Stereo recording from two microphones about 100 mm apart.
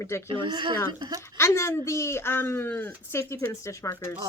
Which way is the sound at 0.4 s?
50° right (ahead or behind).